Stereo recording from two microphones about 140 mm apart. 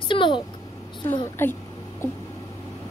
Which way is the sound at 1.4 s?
15° left (ahead or behind).